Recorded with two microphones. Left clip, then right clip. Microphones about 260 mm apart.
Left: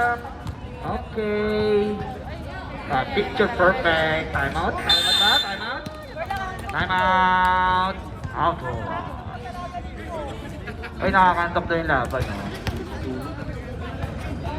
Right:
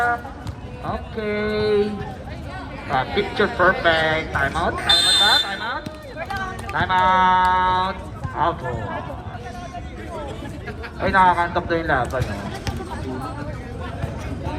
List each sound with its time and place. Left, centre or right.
0.9 s a sound: right
3.2 s speech: right
5.5 s a sound: centre
6.1 s run: left
6.7 s speech: centre
11.0 s speech: centre